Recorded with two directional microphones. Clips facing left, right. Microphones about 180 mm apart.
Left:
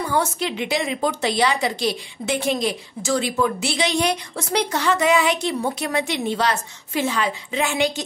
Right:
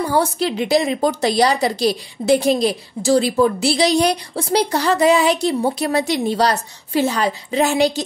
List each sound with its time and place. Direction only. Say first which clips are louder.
0.0 s a woman's voice: right 4 dB; 35° right (ahead or behind)